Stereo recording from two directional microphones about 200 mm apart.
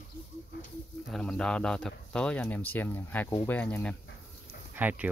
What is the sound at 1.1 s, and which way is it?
Speech, 5° left (ahead or behind).